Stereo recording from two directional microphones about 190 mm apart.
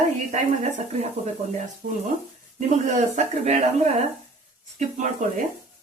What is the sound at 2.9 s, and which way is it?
Speech, 40° right (ahead or behind).